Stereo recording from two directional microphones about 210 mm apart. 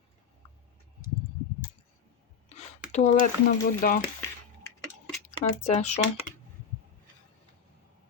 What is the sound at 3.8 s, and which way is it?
Speech, 40° left (ahead or behind).